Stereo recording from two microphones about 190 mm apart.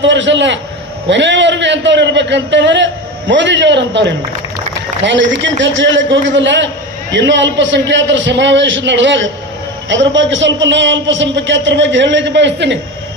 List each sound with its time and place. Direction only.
0.0 s a man's voice: 70° right (ahead or behind)